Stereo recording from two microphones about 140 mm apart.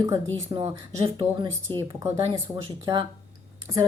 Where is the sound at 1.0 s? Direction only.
40° right (ahead or behind).